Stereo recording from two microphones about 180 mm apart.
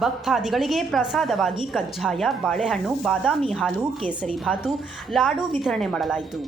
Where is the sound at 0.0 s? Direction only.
Centre (ahead or behind).